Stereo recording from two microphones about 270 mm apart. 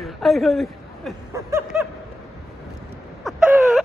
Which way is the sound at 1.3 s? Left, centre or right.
Centre.